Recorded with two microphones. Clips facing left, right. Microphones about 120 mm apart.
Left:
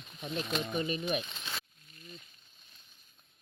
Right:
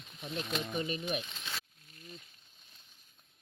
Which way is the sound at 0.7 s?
55° left (ahead or behind).